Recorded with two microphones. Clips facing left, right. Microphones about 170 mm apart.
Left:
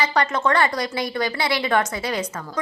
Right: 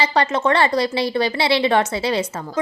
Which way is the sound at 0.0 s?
25° right (ahead or behind).